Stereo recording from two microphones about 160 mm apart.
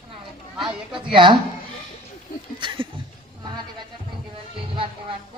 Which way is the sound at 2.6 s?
30° right (ahead or behind).